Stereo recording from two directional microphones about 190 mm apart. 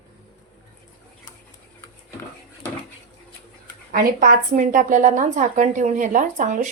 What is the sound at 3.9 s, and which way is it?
A woman's voice, 45° right (ahead or behind).